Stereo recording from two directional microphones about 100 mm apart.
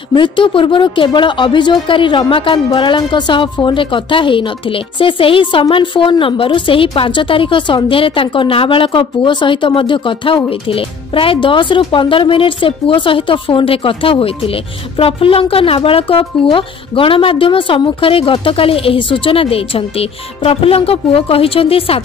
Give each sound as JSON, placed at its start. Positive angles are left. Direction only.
{"t": 0.1, "sound": "a woman's voice", "side_deg": 55}